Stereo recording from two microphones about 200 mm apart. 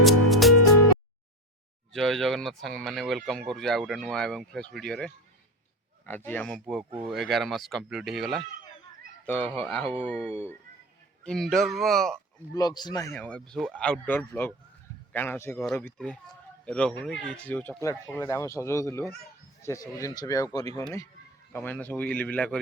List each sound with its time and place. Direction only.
0.0 s music: centre (ahead or behind)
1.9 s speech: centre (ahead or behind)
12.5 s speech: 20° left (ahead or behind)